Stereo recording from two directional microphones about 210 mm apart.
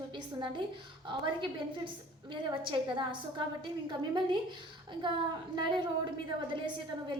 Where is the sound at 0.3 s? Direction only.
20° right (ahead or behind).